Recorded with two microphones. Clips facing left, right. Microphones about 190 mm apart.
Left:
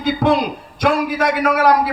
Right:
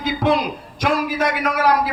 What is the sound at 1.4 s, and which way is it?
Speech, 55° left (ahead or behind).